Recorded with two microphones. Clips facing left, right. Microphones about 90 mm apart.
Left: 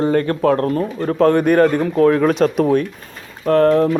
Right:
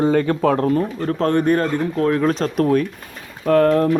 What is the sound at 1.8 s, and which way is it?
Speech, 30° left (ahead or behind).